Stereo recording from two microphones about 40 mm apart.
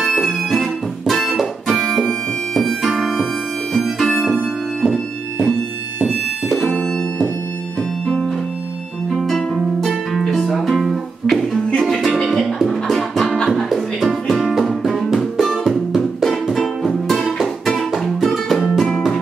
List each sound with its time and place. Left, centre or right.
0.1 s music: centre
6.6 s music: centre
9.1 s music: centre
9.8 s harp: centre
10.5 s music: centre
12.6 s music: centre
18.6 s music: centre